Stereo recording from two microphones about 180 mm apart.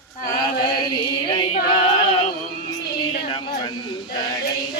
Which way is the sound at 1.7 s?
30° left (ahead or behind).